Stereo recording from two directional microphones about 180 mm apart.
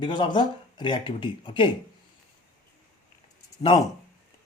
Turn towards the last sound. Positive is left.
turn(degrees=25)  # may be behind; listen again after turning